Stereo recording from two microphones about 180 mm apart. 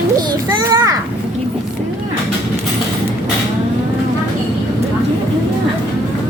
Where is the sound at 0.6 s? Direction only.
20° right (ahead or behind).